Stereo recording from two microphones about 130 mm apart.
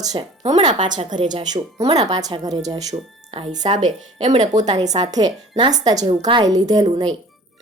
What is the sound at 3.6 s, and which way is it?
A woman's voice, 60° right (ahead or behind).